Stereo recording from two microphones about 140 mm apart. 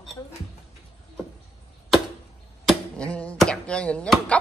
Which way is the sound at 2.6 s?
10° left (ahead or behind).